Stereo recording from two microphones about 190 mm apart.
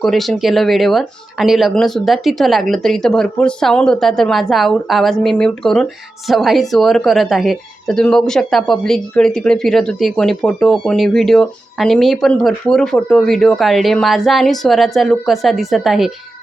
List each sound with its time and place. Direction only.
0.0 s speech: centre (ahead or behind)